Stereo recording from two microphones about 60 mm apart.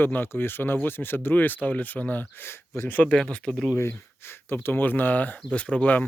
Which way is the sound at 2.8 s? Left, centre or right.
Left.